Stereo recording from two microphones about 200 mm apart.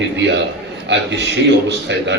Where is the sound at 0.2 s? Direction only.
60° right (ahead or behind).